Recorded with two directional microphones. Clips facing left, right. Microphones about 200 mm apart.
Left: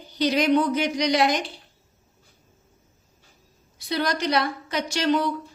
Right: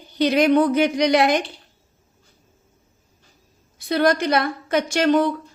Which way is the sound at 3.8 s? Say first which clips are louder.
Right 7 dB; 50° right (ahead or behind).